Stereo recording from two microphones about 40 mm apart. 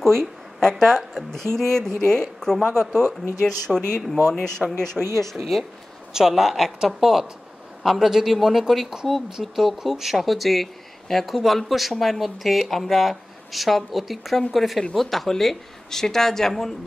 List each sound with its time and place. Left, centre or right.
0.2 s speech: centre
6.1 s speech: centre